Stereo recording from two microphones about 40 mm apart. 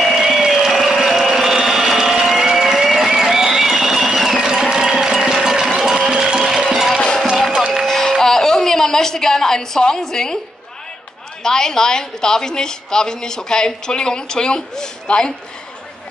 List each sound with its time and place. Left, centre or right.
0.0 s a sound: centre
3.2 s music: centre
4.6 s a sound: centre
6.6 s music: centre
7.8 s music: centre
10.0 s a woman's voice: centre
11.4 s a woman's voice: centre